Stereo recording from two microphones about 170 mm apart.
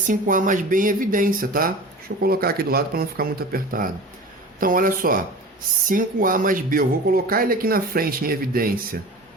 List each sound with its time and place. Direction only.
0.1 s speech: 50° right (ahead or behind)